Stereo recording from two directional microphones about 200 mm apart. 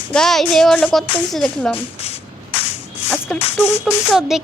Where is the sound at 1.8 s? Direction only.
30° left (ahead or behind).